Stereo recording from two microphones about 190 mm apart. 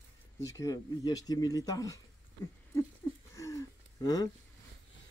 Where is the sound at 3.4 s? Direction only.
15° left (ahead or behind).